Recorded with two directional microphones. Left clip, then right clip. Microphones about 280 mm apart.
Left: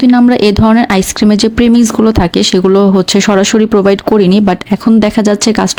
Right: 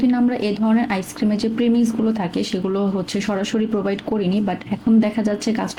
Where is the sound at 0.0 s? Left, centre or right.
Left.